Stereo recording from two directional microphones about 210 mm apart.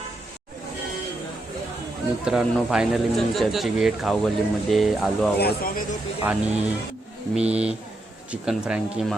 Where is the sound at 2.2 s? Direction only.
Centre (ahead or behind).